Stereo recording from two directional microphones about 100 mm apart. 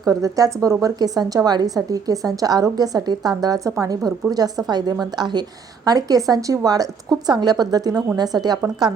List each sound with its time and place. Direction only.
0.0 s a woman's voice: 35° right (ahead or behind)